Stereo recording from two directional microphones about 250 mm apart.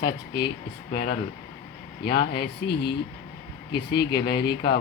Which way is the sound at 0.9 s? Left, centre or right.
Left.